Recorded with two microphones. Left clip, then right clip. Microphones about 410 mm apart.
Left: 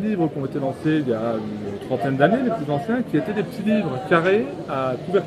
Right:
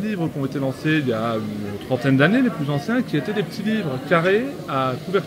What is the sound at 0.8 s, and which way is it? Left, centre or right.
Speech, right.